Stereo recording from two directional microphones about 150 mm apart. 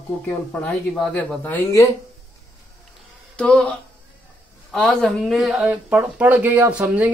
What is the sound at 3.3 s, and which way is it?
Speech, 5° left (ahead or behind).